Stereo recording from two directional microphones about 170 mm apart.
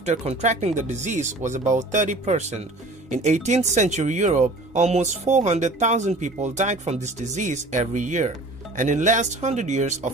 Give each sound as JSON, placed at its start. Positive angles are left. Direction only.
{"t": 0.0, "sound": "speech", "side_deg": -40}